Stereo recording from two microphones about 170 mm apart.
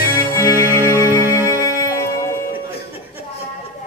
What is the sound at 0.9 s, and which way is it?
Music, 15° right (ahead or behind).